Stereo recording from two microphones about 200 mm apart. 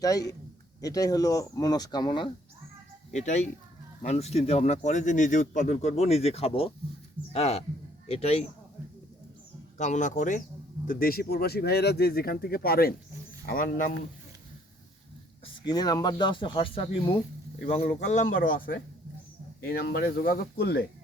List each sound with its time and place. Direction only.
0.0 s speech: 20° left (ahead or behind)
3.1 s speech: 35° left (ahead or behind)
9.7 s speech: 35° left (ahead or behind)
15.6 s speech: 20° left (ahead or behind); by 20.8 s 55° left (ahead or behind)